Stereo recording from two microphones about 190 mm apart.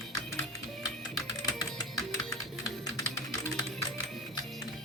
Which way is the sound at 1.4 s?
20° left (ahead or behind).